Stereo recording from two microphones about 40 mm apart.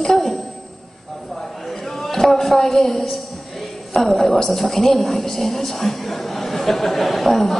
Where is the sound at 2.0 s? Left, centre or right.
Centre.